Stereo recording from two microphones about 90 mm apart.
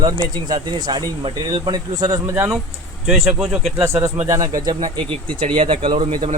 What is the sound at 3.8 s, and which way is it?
Speech, 35° right (ahead or behind).